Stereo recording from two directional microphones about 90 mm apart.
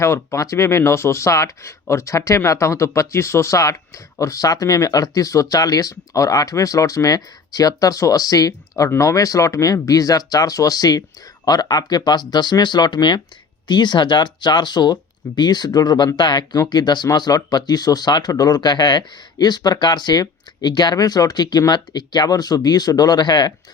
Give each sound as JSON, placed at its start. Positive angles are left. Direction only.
{"t": 0.0, "sound": "speech", "side_deg": 30}